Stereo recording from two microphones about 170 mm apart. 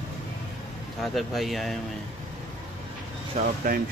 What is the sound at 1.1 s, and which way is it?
Speech, centre (ahead or behind).